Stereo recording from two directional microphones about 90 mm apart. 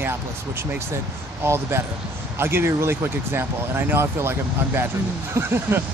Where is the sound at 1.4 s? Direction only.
30° right (ahead or behind).